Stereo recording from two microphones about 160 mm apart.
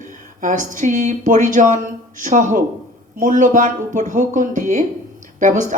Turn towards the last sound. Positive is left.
turn(degrees=-50)  # may be behind; listen again after turning